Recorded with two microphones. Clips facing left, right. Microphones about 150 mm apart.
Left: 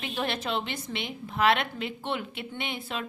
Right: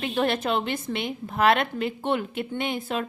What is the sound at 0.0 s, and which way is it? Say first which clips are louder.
A woman's voice: right 7 dB; 55° right (ahead or behind).